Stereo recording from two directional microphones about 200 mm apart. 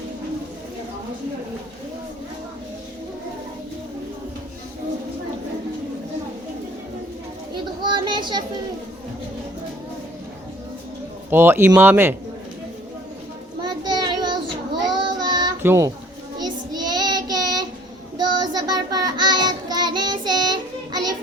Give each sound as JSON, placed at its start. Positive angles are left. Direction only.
{"t": 7.5, "sound": "children playing", "side_deg": -20}
{"t": 11.3, "sound": "speech", "side_deg": -10}
{"t": 13.6, "sound": "child singing", "side_deg": -20}